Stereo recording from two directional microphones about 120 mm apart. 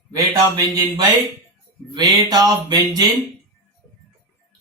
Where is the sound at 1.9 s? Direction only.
35° right (ahead or behind).